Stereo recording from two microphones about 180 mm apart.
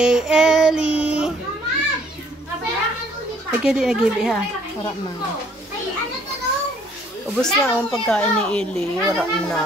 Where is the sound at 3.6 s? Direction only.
5° right (ahead or behind).